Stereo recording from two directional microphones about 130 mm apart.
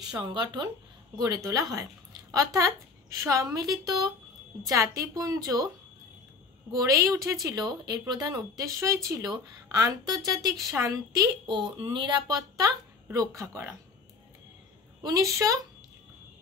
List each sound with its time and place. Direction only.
0.2 s a woman's voice: 35° right (ahead or behind)
6.7 s a woman's voice: 25° right (ahead or behind)
15.0 s a woman's voice: 25° right (ahead or behind)